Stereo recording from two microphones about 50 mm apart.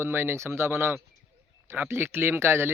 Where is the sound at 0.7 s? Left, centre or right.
Right.